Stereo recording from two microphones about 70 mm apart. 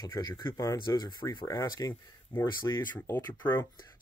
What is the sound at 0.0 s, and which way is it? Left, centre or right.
Speech, left.